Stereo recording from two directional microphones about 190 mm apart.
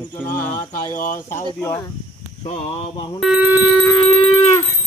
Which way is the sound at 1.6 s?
15° left (ahead or behind).